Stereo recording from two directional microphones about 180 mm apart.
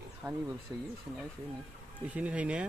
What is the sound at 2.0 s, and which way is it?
Speech, 5° right (ahead or behind).